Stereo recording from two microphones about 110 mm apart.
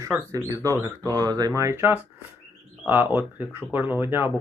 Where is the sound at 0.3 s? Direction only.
30° right (ahead or behind).